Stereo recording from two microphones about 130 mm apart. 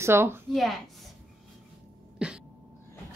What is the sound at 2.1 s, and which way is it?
Cough, 5° right (ahead or behind).